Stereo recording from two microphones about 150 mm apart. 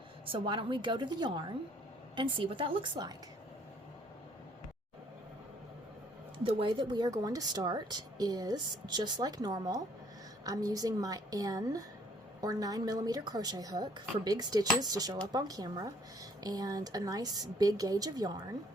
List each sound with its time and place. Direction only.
0.3 s a woman's voice: 35° right (ahead or behind)
6.4 s speech: 35° right (ahead or behind)